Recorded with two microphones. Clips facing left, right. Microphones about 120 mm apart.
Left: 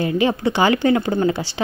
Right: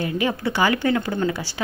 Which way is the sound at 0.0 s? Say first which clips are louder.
Left 5 dB; 25° left (ahead or behind).